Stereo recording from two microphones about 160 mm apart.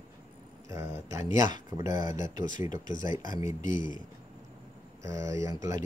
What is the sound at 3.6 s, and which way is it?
Speech, 55° left (ahead or behind).